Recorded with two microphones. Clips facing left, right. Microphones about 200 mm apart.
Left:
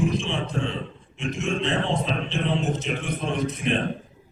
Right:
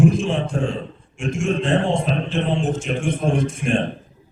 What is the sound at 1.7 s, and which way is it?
Speech, 35° right (ahead or behind).